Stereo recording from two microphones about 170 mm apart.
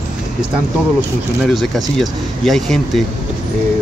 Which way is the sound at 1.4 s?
Centre (ahead or behind).